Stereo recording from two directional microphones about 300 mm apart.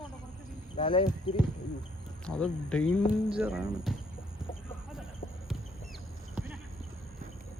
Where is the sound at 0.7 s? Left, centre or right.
Centre.